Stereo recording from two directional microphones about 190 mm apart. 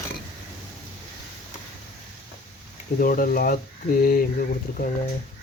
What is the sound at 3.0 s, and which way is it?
Speech, 50° left (ahead or behind).